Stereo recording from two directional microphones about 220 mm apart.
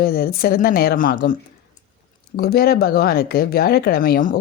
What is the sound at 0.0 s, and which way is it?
Speech, 45° left (ahead or behind).